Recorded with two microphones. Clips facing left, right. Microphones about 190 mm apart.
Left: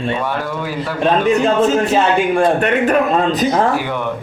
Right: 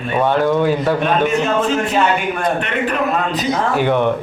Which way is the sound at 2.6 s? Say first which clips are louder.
Left 6 dB; 45° left (ahead or behind).